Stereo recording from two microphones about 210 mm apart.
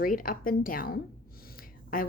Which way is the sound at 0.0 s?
40° left (ahead or behind).